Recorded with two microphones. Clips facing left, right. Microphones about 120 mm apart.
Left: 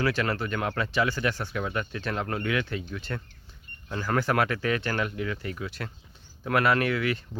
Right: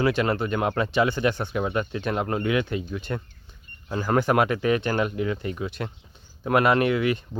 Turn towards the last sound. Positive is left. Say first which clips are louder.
# right 4 dB
turn(degrees=-20)  # may be behind; listen again after turning